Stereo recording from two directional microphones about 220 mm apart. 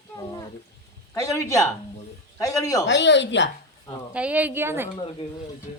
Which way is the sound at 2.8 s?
55° left (ahead or behind).